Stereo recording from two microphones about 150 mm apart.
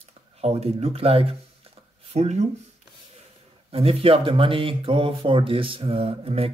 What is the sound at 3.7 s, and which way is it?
Speech, 40° right (ahead or behind).